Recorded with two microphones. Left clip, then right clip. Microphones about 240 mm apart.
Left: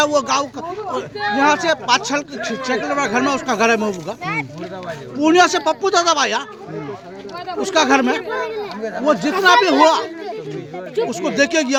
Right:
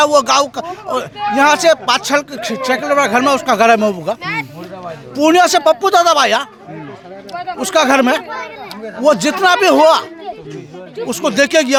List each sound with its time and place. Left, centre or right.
0.0 s speech: right
4.2 s speech: centre
5.1 s speech: right
7.6 s speech: right
11.1 s speech: right